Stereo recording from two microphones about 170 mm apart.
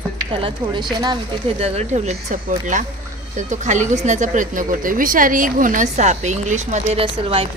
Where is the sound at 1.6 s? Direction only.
40° right (ahead or behind).